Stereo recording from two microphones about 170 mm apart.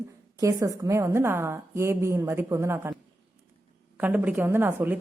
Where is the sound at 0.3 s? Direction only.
20° right (ahead or behind).